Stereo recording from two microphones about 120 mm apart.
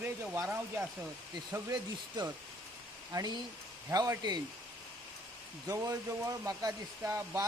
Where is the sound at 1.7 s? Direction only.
35° right (ahead or behind).